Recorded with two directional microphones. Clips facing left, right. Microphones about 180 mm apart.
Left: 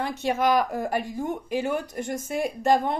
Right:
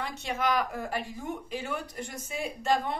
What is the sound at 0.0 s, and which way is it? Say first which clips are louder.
Speech: left 7 dB; 45° left (ahead or behind).